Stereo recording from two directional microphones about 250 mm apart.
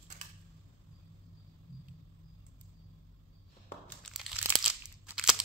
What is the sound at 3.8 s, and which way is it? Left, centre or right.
Crunch, centre.